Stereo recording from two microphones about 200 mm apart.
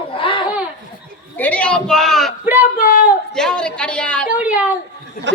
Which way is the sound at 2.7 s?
40° left (ahead or behind).